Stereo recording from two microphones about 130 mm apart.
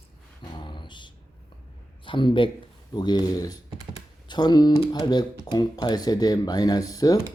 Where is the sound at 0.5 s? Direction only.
35° left (ahead or behind).